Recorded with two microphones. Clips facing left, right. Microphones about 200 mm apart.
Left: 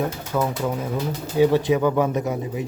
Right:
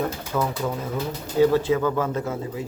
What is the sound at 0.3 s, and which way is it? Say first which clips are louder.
Speech: left 2 dB; 5° left (ahead or behind).